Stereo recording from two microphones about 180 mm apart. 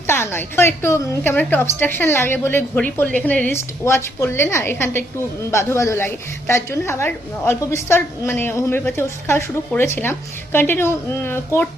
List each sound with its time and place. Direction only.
0.1 s a woman's voice: 15° left (ahead or behind)